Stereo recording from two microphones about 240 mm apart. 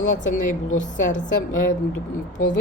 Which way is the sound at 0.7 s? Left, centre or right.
Left.